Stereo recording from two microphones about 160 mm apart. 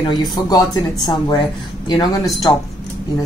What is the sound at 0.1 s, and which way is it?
A woman's voice, 25° left (ahead or behind).